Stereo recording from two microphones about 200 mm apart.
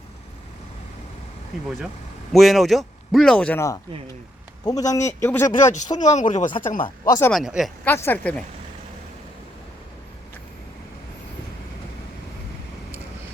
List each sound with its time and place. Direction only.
2.3 s a man's voice: centre (ahead or behind)
5.5 s speech: 35° left (ahead or behind)
6.8 s a man's voice: 20° left (ahead or behind)
7.3 s a man's voice: centre (ahead or behind)
7.9 s a man's voice: 10° left (ahead or behind)